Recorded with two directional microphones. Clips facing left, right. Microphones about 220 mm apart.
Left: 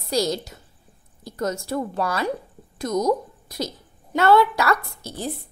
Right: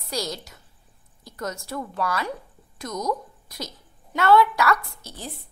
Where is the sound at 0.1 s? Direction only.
25° left (ahead or behind).